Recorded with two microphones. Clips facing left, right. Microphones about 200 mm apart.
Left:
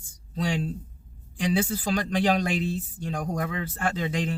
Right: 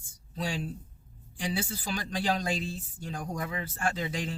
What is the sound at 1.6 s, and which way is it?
Speech, 75° left (ahead or behind).